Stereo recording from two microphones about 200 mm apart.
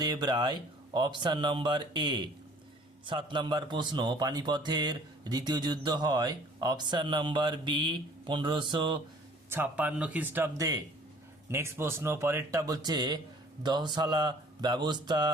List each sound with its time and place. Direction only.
0.0 s speech: 20° right (ahead or behind)
9.5 s speech: 10° right (ahead or behind)